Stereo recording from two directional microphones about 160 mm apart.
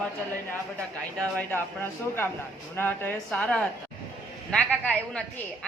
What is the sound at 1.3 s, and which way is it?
A woman's voice, 15° left (ahead or behind).